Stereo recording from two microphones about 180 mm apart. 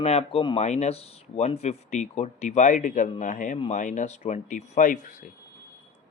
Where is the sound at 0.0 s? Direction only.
35° left (ahead or behind).